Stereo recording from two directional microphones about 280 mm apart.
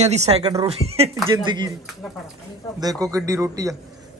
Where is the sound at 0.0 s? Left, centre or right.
Right.